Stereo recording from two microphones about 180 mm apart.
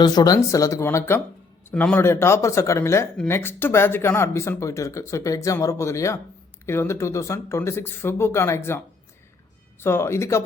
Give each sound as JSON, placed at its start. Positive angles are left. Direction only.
{"t": 0.0, "sound": "speech", "side_deg": 20}
{"t": 9.8, "sound": "speech", "side_deg": 15}